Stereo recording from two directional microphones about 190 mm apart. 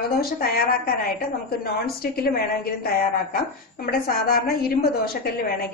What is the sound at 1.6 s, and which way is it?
Speech, 55° left (ahead or behind).